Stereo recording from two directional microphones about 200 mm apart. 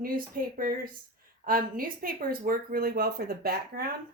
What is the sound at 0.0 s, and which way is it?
Speech, 45° right (ahead or behind).